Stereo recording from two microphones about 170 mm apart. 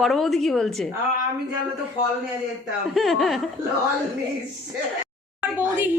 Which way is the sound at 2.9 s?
Centre (ahead or behind).